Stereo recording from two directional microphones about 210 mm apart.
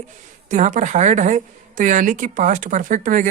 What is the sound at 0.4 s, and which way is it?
A woman's voice, 35° right (ahead or behind).